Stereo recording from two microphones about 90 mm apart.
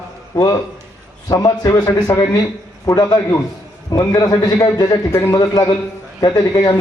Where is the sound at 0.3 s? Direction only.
40° left (ahead or behind).